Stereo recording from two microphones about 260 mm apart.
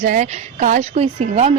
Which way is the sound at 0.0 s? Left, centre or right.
Right.